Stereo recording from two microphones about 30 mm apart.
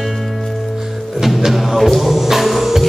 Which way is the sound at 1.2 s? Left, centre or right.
Centre.